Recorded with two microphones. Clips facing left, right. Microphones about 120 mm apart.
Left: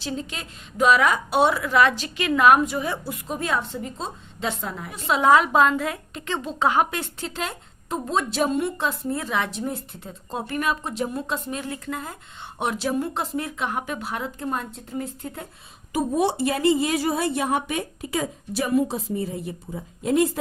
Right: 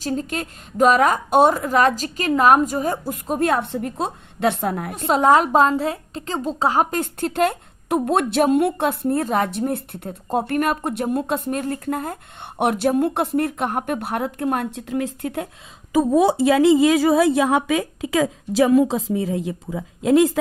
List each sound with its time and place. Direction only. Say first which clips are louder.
0.0 s a woman's voice: right 6 dB; 45° right (ahead or behind); by 15.4 s 80° right
17.4 s a woman's voice: right 6 dB; 90° right